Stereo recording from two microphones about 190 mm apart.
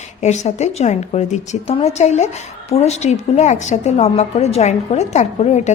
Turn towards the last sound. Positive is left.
turn(degrees=35)  # may be behind; listen again after turning